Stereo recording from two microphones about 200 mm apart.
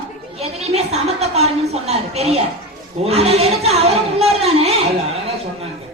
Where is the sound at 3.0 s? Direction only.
30° right (ahead or behind).